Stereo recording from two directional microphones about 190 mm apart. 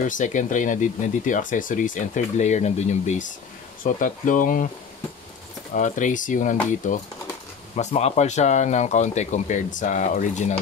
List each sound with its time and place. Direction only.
0.1 s speech: 40° left (ahead or behind)
5.8 s speech: 40° left (ahead or behind)